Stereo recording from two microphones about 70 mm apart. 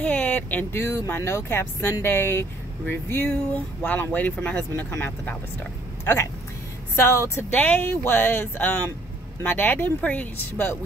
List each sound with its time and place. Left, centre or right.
0.0 s a sound: left
0.8 s speech: left
3.3 s speech: left
7.0 s speech: left
7.5 s speech: left